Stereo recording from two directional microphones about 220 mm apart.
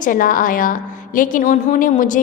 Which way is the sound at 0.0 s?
40° left (ahead or behind).